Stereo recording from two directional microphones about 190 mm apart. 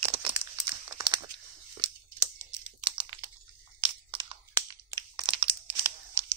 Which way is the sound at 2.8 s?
25° right (ahead or behind).